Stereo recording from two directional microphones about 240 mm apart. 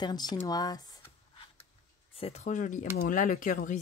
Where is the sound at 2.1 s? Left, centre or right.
Left.